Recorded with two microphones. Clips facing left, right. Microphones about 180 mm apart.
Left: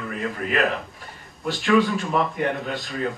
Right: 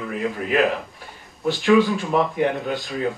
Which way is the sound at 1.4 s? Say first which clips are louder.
Right 3 dB; centre (ahead or behind).